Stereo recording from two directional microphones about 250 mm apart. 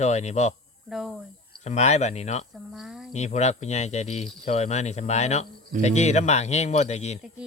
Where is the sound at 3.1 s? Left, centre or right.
Left.